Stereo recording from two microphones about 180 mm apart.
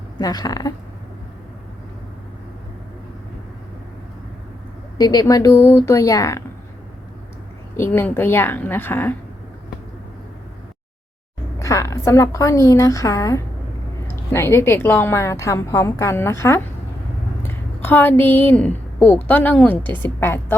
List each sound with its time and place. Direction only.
0.2 s speech: 20° left (ahead or behind)
4.9 s a woman's voice: 20° left (ahead or behind)
7.8 s a woman's voice: 10° left (ahead or behind)
11.6 s a woman's voice: 20° left (ahead or behind)